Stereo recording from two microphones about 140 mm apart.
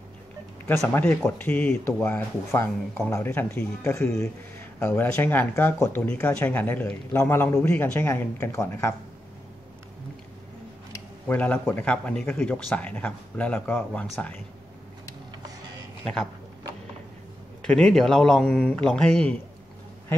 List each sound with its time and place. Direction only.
0.8 s speech: 15° left (ahead or behind)
4.2 s speech: 20° left (ahead or behind)
11.2 s speech: 10° left (ahead or behind)
17.6 s a man's voice: 5° left (ahead or behind)